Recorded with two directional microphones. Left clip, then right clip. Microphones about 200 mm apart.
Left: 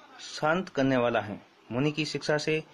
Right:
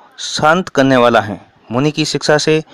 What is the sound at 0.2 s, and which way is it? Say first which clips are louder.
A man's voice: right 16 dB; 45° right (ahead or behind).